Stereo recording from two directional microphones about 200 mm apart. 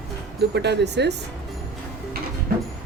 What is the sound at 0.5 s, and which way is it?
Speech, 55° right (ahead or behind).